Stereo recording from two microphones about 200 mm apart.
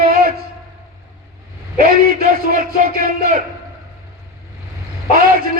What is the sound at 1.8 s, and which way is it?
A man's voice, 45° right (ahead or behind).